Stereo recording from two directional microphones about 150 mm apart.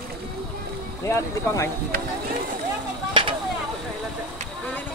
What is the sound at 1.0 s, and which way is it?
Speech, 20° left (ahead or behind).